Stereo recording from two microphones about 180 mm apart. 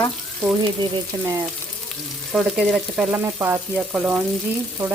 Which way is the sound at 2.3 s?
5° right (ahead or behind).